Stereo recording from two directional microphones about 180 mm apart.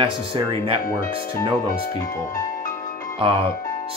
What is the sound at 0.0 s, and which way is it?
Speech, 30° right (ahead or behind).